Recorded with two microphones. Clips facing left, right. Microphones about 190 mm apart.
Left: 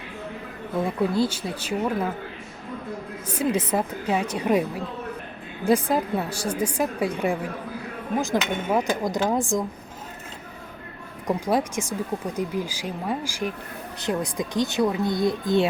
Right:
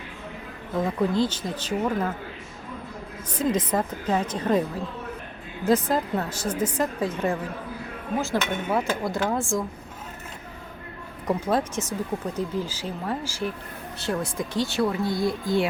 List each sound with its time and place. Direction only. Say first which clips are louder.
0.8 s speech: even; 10° left (ahead or behind)
3.2 s speech: even; 10° left (ahead or behind)
5.6 s speech: left 1 dB; 10° left (ahead or behind)
11.3 s speech: left 1 dB; 10° left (ahead or behind)